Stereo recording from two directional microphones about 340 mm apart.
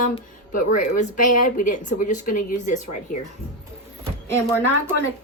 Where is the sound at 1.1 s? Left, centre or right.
Left.